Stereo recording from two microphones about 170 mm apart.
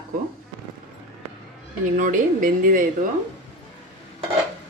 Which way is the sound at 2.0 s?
50° right (ahead or behind).